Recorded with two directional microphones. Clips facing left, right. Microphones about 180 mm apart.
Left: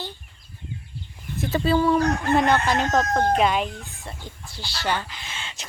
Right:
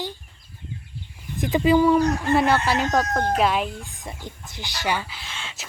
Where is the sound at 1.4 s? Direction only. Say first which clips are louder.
Right 3 dB; 15° right (ahead or behind).